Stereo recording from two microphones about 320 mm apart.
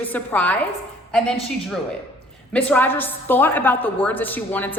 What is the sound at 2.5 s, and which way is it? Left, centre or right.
A woman's voice, centre.